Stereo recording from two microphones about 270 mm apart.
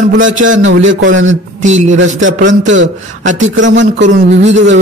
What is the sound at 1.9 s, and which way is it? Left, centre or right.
A man's voice, right.